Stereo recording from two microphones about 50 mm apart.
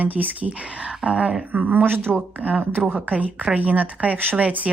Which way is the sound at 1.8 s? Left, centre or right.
Right.